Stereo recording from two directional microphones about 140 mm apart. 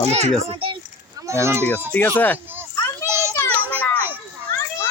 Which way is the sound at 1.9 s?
15° left (ahead or behind).